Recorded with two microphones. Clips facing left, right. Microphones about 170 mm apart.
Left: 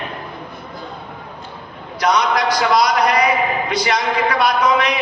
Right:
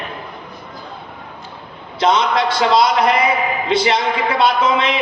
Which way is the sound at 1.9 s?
25° right (ahead or behind).